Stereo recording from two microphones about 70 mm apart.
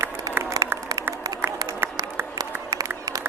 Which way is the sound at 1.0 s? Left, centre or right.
Right.